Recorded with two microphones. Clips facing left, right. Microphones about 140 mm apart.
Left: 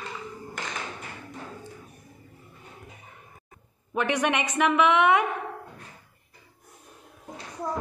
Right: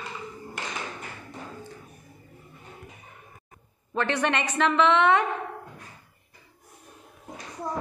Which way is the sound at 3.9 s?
15° left (ahead or behind).